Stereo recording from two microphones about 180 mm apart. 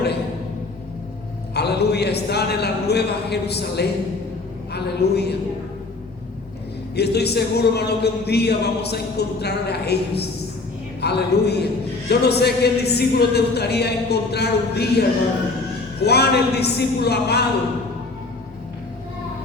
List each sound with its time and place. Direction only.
1.5 s a man's voice: 65° left (ahead or behind)
6.9 s a man's voice: 65° left (ahead or behind)